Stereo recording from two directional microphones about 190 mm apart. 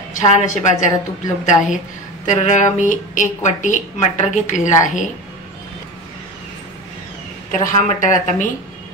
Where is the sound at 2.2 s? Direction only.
40° left (ahead or behind).